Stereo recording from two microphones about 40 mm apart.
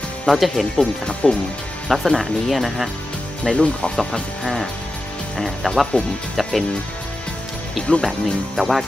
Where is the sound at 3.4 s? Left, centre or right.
Left.